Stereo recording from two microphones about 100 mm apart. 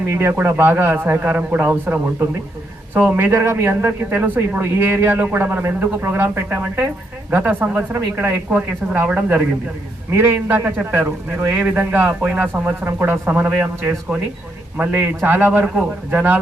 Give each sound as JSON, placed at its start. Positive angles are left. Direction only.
{"t": 0.0, "sound": "speech", "side_deg": -25}